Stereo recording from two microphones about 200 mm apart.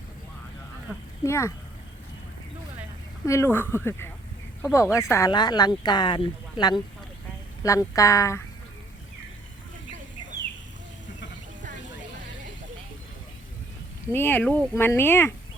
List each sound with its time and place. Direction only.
1.2 s speech: 15° left (ahead or behind)
3.2 s speech: 15° left (ahead or behind)
14.1 s speech: 10° left (ahead or behind)